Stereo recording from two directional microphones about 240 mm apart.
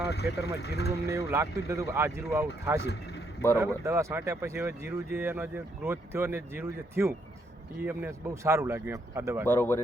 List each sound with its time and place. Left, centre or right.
0.1 s speech: left
1.3 s speech: centre
2.8 s a man's voice: left
3.6 s speech: centre
9.5 s speech: centre